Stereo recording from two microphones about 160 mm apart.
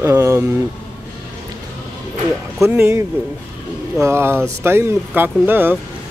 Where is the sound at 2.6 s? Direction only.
15° right (ahead or behind).